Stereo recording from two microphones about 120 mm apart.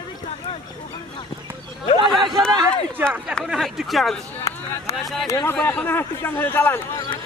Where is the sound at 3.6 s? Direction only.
Centre (ahead or behind).